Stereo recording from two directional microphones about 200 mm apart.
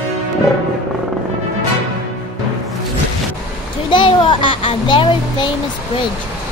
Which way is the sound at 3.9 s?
25° left (ahead or behind).